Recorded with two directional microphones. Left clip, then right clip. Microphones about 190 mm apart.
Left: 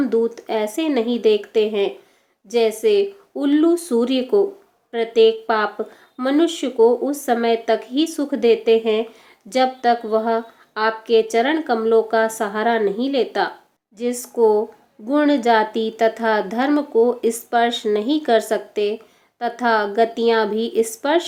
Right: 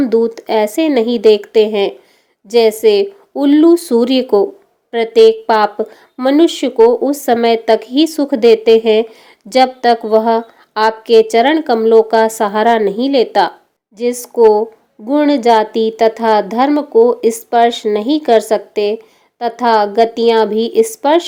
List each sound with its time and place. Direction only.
0.0 s speech: 35° right (ahead or behind)
13.9 s speech: 30° right (ahead or behind)